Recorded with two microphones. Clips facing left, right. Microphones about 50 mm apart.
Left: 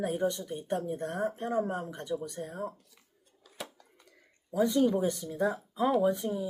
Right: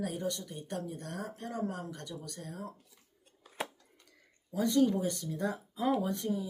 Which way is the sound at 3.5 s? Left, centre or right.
Right.